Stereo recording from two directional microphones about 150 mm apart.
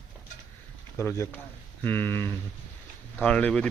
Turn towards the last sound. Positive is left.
turn(degrees=10)  # may be behind; listen again after turning